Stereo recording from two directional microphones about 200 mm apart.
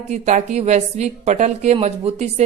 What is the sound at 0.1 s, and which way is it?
A woman's voice, 35° right (ahead or behind).